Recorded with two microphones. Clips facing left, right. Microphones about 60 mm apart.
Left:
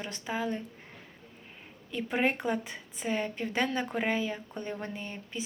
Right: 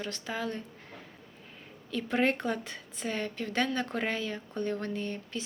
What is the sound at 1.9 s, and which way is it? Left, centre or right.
A woman's voice, centre.